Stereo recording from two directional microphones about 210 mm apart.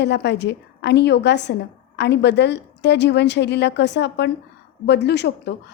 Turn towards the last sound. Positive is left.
turn(degrees=55)  # may be behind; listen again after turning